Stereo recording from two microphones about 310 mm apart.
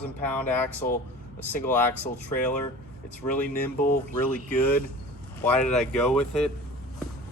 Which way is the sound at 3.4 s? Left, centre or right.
Left.